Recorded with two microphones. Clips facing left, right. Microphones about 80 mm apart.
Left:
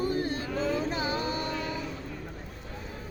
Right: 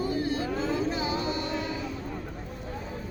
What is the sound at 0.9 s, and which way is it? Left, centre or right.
Music, left.